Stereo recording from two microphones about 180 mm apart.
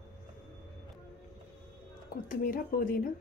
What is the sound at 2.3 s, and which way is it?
Speech, 50° left (ahead or behind).